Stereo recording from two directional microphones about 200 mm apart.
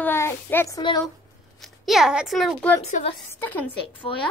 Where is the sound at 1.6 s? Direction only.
Centre (ahead or behind).